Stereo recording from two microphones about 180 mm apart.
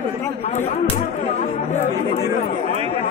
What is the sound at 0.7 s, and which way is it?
Speech, 45° left (ahead or behind).